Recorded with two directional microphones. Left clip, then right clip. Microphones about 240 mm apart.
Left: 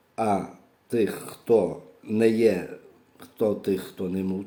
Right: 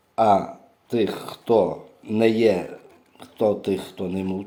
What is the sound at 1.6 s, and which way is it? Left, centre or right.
Speech, right.